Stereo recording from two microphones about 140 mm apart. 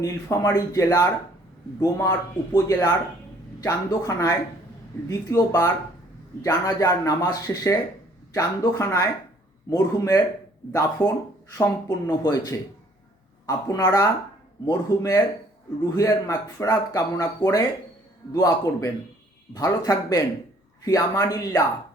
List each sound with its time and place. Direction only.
0.0 s speech: 25° left (ahead or behind)